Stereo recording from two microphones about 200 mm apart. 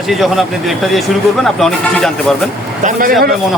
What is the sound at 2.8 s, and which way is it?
Speech, 40° right (ahead or behind).